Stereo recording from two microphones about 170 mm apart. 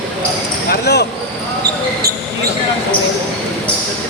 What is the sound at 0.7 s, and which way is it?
Speech, 75° left (ahead or behind).